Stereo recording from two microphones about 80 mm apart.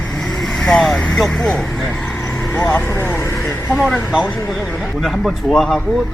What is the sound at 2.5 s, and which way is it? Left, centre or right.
Speech, left.